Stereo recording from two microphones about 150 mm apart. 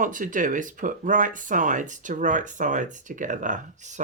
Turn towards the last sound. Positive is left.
turn(degrees=-55)  # may be behind; listen again after turning